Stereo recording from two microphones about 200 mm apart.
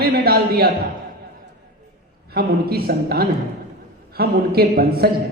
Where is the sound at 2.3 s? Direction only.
50° right (ahead or behind).